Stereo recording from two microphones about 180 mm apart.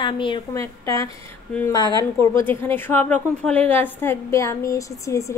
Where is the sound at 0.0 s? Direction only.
25° left (ahead or behind).